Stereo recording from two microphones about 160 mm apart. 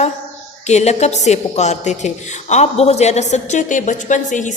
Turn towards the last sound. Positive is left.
turn(degrees=50)  # may be behind; listen again after turning